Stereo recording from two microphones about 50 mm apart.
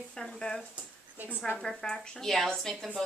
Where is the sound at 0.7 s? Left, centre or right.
Right.